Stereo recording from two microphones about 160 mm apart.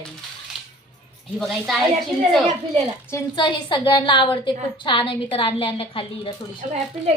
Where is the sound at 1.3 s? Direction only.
Centre (ahead or behind).